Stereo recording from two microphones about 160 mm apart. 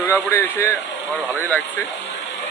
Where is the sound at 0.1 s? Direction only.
15° left (ahead or behind).